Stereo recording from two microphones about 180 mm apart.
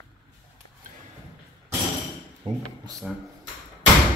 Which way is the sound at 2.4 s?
35° right (ahead or behind).